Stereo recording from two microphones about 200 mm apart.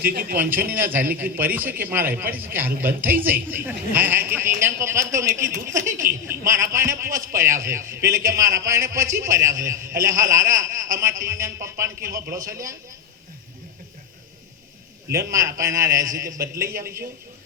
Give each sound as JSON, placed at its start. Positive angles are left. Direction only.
{"t": 0.0, "sound": "speech", "side_deg": -45}
{"t": 0.5, "sound": "a man's voice", "side_deg": -10}
{"t": 15.3, "sound": "a man's voice", "side_deg": -15}